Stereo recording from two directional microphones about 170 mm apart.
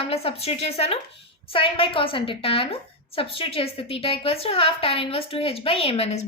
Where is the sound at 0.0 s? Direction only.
35° left (ahead or behind).